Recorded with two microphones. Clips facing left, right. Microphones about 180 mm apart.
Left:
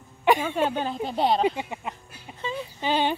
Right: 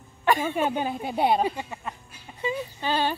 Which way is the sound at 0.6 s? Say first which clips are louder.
Left 1 dB; 10° right (ahead or behind).